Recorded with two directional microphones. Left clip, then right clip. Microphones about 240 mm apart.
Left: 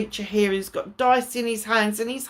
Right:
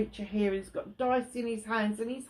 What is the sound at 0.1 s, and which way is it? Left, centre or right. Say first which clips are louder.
Speech: left 9 dB; left.